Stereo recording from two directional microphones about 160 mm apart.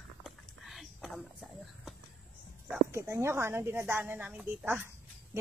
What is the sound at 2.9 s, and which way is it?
A woman's voice, 20° right (ahead or behind).